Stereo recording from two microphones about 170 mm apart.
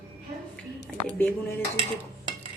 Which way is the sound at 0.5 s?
5° left (ahead or behind).